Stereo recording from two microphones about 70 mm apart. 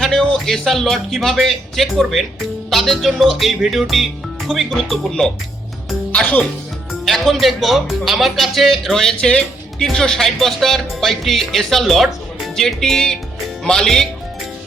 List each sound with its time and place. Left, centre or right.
0.0 s speech: centre
6.1 s speech: left
7.0 s speech: centre